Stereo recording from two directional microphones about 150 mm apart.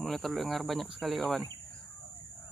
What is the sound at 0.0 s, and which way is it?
Speech, centre (ahead or behind).